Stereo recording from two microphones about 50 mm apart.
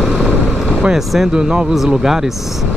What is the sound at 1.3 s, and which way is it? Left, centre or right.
Speech, right.